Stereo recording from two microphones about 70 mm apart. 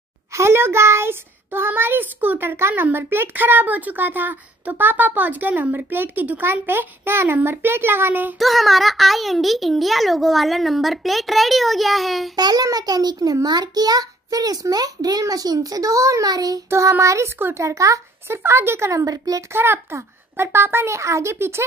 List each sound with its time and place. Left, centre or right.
0.3 s a child's voice: right
8.4 s a child's voice: centre
12.4 s a child's voice: right
12.6 s a child's voice: right
16.3 s a child's voice: right
17.0 s a child's voice: right
18.4 s a child's voice: right
19.0 s a child's voice: right
19.5 s a child's voice: right